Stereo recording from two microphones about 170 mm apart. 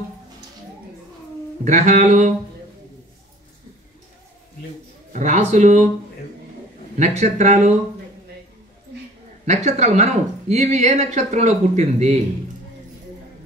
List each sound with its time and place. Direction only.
1.6 s speech: 45° right (ahead or behind)
5.1 s a man's voice: 45° right (ahead or behind)
7.0 s speech: 40° right (ahead or behind)
9.5 s speech: 40° right (ahead or behind)